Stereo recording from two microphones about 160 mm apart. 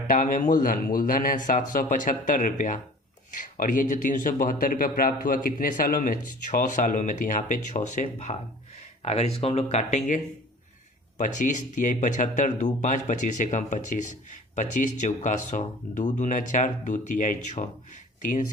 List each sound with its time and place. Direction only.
0.1 s speech: 55° left (ahead or behind)
11.2 s speech: 50° left (ahead or behind)